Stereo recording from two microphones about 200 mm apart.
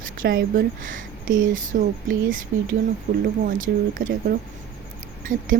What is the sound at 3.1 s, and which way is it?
Speech, 40° right (ahead or behind).